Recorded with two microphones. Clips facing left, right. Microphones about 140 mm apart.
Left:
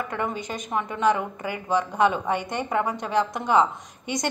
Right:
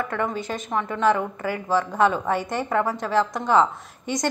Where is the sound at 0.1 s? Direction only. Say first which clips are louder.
Right 2 dB; 15° left (ahead or behind).